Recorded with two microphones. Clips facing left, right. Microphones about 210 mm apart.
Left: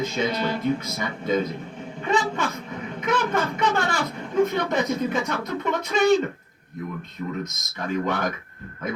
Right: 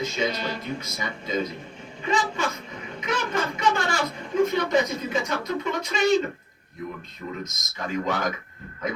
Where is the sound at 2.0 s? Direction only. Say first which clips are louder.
Left 2 dB; 60° left (ahead or behind).